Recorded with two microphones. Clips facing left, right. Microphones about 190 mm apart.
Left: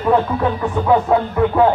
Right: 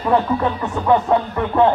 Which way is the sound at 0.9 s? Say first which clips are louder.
Even; 5° left (ahead or behind).